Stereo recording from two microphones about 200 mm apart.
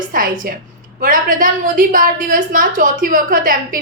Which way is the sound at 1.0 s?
40° right (ahead or behind).